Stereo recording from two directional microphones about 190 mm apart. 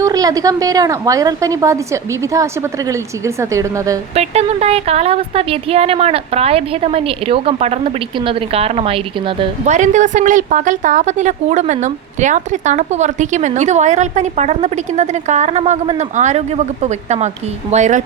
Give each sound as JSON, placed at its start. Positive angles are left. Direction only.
{"t": 0.0, "sound": "a woman's voice", "side_deg": -20}
{"t": 4.1, "sound": "a woman's voice", "side_deg": -35}
{"t": 9.7, "sound": "a woman's voice", "side_deg": -40}